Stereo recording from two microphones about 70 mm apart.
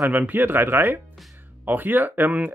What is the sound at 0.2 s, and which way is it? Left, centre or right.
Speech, right.